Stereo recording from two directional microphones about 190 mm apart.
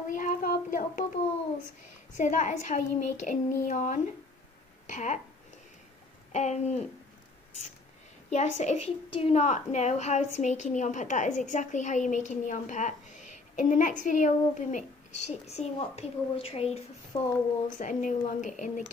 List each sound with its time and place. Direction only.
0.1 s child singing: 45° left (ahead or behind)
2.1 s a woman's voice: 40° left (ahead or behind)
6.3 s a woman's voice: 35° left (ahead or behind)
8.3 s a woman's voice: 40° left (ahead or behind)
17.1 s speech: 20° left (ahead or behind)
17.7 s a woman's voice: 40° left (ahead or behind)